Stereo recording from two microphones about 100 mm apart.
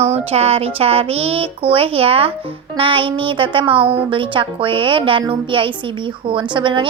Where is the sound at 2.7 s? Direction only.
60° right (ahead or behind).